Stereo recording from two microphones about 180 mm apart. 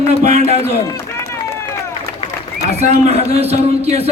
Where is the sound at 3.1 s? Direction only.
35° right (ahead or behind).